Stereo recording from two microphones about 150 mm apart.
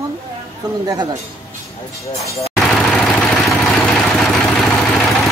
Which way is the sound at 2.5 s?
Centre (ahead or behind).